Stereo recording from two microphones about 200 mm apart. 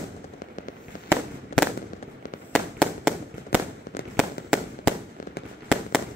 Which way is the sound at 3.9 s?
35° left (ahead or behind).